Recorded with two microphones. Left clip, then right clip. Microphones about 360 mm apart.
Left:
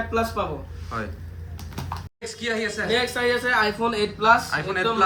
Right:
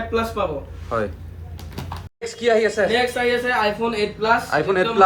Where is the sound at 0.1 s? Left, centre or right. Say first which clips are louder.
Right 3 dB; centre.